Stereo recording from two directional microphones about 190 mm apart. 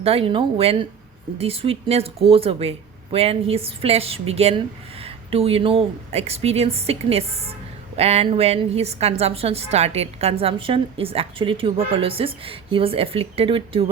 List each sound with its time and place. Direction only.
0.0 s a woman's voice: 30° right (ahead or behind)